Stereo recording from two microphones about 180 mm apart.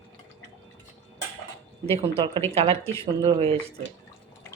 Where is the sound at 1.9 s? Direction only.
30° right (ahead or behind).